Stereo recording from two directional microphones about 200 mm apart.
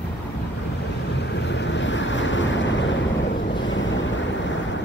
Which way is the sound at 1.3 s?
60° left (ahead or behind).